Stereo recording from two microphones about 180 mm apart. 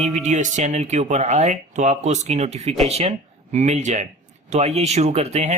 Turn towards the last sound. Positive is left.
turn(degrees=-40)  # may be behind; listen again after turning